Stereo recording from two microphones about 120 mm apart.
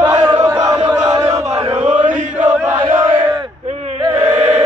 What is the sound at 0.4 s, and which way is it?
Chant, 30° right (ahead or behind).